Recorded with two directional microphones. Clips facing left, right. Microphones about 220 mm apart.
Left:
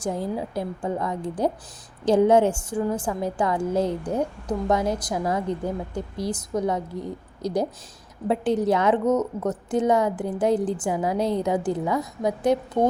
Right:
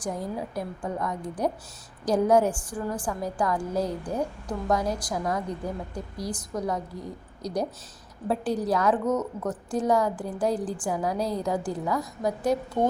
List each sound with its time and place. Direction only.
0.0 s a woman's voice: 25° left (ahead or behind)